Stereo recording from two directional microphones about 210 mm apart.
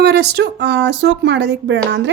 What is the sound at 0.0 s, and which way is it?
Speech, 55° right (ahead or behind).